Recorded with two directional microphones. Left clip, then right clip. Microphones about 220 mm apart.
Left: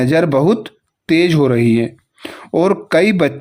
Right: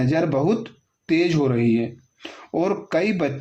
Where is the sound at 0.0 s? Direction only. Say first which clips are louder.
Left 8 dB; 35° left (ahead or behind).